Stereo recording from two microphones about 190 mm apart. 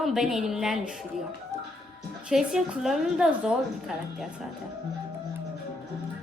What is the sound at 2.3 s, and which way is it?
A woman's voice, centre (ahead or behind).